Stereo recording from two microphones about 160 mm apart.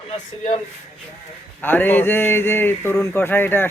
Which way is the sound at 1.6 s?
15° left (ahead or behind).